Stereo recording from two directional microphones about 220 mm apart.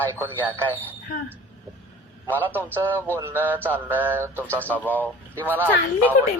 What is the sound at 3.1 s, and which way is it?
Speech, 10° right (ahead or behind).